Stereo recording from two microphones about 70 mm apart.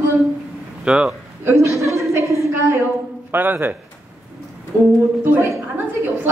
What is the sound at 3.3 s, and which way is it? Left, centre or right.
Speech, right.